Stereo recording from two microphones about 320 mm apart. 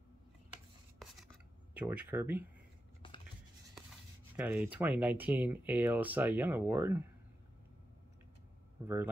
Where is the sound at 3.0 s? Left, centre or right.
Centre.